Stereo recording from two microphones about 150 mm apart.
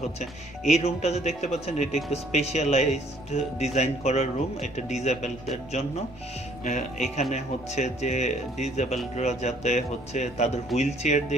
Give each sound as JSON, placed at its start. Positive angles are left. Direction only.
{"t": 0.7, "sound": "speech", "side_deg": 45}